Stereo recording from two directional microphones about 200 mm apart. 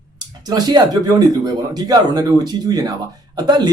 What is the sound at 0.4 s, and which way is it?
Speech, 20° right (ahead or behind).